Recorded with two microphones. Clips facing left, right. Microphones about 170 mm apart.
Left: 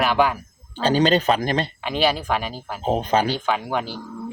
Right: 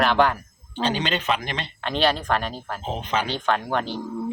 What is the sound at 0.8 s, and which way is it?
Speech, 40° left (ahead or behind).